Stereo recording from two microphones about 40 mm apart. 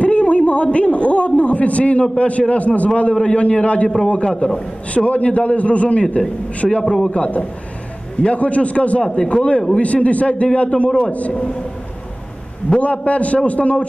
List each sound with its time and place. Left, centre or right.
0.0 s a sound: left
2.1 s a man's voice: left
6.8 s a man's voice: centre
7.1 s a man's voice: left
12.6 s a man's voice: left